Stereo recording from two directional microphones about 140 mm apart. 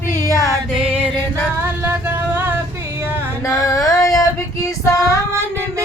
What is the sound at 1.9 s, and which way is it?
Vehicle, 15° right (ahead or behind).